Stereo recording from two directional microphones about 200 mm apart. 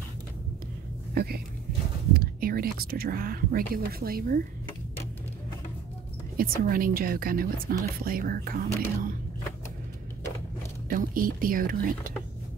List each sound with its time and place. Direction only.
1.1 s speech: 50° right (ahead or behind)
6.3 s speech: 45° right (ahead or behind)
10.9 s speech: 45° right (ahead or behind)